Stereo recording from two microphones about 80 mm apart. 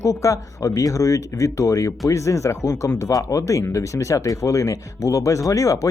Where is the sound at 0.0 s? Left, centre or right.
Left.